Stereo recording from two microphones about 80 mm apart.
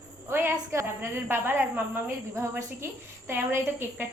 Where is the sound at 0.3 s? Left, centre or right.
Right.